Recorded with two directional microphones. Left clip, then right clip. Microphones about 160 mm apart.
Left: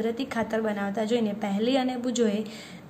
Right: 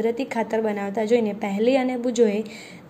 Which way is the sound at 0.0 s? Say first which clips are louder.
Right 5 dB; 20° right (ahead or behind).